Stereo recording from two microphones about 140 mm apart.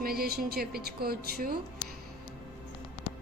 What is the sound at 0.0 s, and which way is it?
A woman's voice, 90° right.